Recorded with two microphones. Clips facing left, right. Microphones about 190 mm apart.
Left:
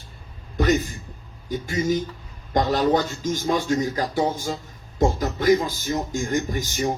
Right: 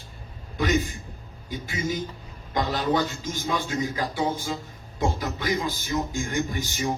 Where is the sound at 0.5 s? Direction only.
45° left (ahead or behind).